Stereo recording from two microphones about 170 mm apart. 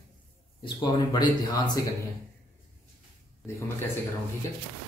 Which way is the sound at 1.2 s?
25° left (ahead or behind).